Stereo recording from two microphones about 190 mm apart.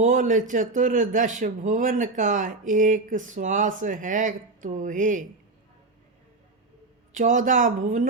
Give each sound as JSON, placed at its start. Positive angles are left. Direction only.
{"t": 0.0, "sound": "speech", "side_deg": -45}
{"t": 7.1, "sound": "speech", "side_deg": -40}